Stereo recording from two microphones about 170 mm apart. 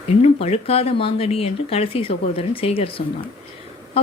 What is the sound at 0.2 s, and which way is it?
Speech, 40° left (ahead or behind).